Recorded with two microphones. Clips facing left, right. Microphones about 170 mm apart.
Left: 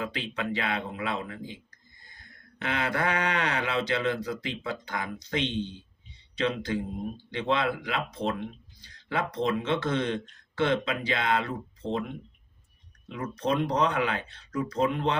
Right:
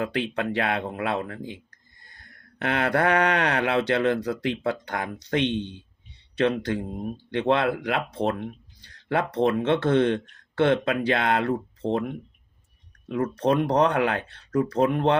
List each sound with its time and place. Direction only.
0.0 s speech: 60° right (ahead or behind)